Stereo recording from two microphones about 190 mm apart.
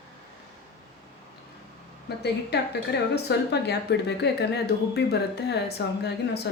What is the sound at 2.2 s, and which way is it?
Speech, 60° left (ahead or behind).